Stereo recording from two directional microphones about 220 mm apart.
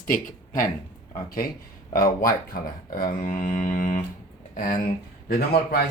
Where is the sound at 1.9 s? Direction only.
35° left (ahead or behind).